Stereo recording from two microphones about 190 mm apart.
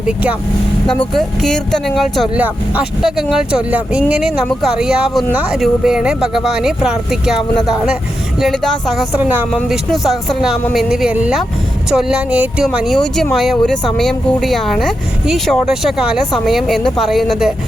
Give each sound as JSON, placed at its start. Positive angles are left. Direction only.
{"t": 0.0, "sound": "speech", "side_deg": -5}